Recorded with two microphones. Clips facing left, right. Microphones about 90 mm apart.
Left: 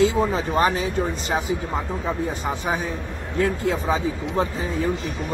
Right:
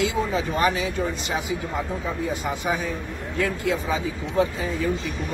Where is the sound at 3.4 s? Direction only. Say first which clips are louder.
Left 2 dB; 35° left (ahead or behind).